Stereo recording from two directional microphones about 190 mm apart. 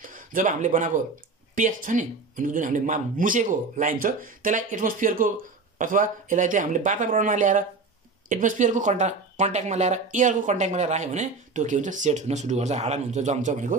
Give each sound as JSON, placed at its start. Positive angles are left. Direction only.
{"t": 0.0, "sound": "speech", "side_deg": -45}